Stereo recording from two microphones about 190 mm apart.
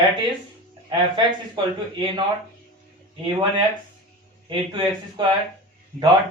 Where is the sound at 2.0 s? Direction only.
25° right (ahead or behind).